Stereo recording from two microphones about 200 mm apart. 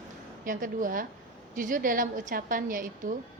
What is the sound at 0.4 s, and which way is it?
A woman's voice, 40° right (ahead or behind).